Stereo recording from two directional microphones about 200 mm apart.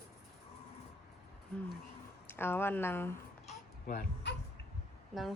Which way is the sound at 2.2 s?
10° left (ahead or behind).